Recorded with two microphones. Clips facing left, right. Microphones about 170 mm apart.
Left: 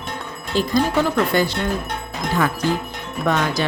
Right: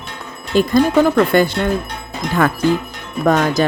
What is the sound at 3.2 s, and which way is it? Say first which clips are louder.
Speech: right 6 dB; 45° right (ahead or behind).